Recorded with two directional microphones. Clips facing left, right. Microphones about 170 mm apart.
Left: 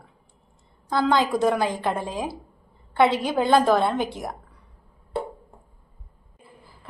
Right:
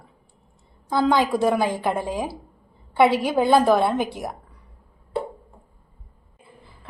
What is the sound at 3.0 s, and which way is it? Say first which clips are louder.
Speech: right 3 dB; 25° left (ahead or behind).